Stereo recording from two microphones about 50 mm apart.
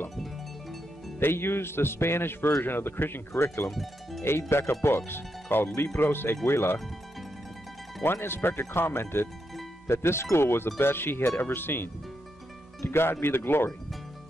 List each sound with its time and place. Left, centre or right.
1.2 s speech: left
3.7 s speech: centre
4.2 s speech: left
8.0 s speech: left